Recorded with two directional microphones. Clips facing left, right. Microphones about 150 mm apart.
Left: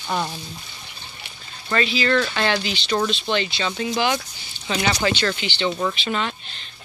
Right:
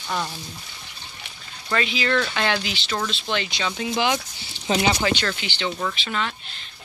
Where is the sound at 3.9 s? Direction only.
15° right (ahead or behind).